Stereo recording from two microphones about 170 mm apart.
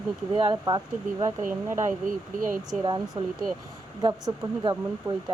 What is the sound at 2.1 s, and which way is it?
Speech, 50° right (ahead or behind).